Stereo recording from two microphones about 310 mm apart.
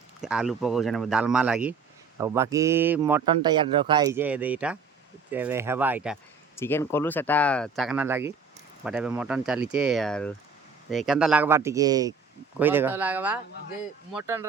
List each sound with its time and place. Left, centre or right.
0.2 s a man's voice: centre
6.6 s a man's voice: centre